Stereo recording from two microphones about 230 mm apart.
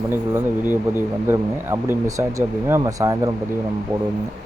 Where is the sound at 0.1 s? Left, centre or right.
Centre.